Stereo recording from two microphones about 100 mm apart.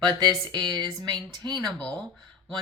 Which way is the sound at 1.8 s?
10° left (ahead or behind).